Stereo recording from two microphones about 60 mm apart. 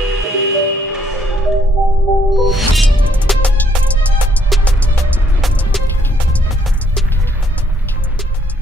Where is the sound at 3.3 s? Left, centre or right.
Centre.